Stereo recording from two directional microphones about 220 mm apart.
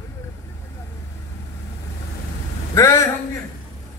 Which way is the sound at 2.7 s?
15° left (ahead or behind).